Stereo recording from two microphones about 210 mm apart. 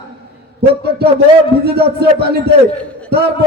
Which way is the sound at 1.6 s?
50° right (ahead or behind).